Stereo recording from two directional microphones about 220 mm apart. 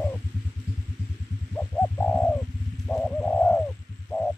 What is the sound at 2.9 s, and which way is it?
Music, 5° left (ahead or behind).